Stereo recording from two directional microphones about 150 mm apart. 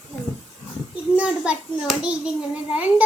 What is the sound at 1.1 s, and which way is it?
A child's voice, 10° right (ahead or behind).